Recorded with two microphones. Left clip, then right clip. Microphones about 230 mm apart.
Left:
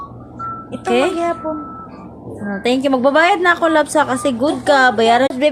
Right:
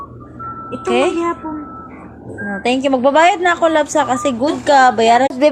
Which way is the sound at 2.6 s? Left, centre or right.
Centre.